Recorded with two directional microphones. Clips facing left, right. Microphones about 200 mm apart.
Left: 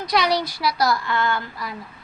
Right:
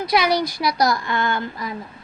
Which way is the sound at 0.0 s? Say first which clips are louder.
Right 2 dB; 10° right (ahead or behind).